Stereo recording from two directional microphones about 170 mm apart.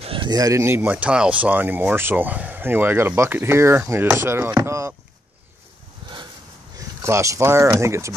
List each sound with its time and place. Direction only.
0.0 s speech: 30° right (ahead or behind)
6.8 s speech: 15° right (ahead or behind)